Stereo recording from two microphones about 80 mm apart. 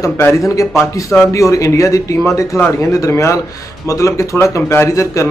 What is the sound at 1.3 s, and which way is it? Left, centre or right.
A man's voice, left.